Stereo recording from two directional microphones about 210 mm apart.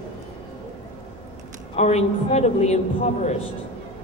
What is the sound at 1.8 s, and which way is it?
A man's voice, 30° left (ahead or behind).